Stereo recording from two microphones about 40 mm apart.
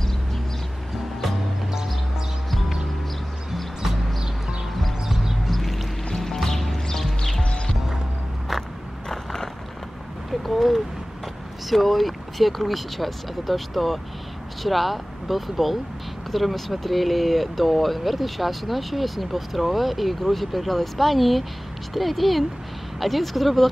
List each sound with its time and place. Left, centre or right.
5.0 s music: centre
5.5 s music: centre
7.4 s clip-clop: left
9.1 s a sound: centre
10.4 s a sound: centre
11.7 s speech: centre